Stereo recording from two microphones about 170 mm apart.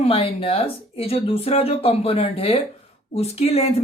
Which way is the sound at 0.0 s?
35° left (ahead or behind).